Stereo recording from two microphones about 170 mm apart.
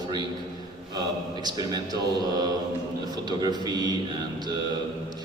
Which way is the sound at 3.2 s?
25° right (ahead or behind).